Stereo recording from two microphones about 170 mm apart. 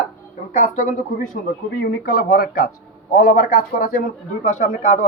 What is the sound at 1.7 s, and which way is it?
Speech, 65° left (ahead or behind).